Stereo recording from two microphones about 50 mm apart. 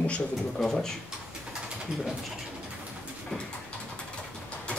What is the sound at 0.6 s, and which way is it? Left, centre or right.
Speech, centre.